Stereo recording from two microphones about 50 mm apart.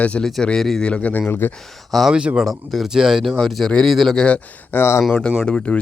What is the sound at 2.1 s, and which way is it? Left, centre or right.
Speech, centre.